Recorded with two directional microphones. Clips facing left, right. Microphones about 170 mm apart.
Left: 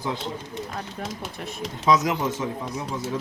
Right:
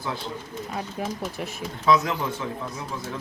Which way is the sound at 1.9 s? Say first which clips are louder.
Left 1 dB; 20° left (ahead or behind).